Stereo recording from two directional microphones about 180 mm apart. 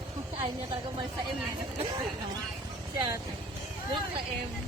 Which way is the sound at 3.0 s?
25° right (ahead or behind).